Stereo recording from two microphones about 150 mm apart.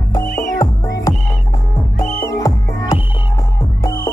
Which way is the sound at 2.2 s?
25° left (ahead or behind).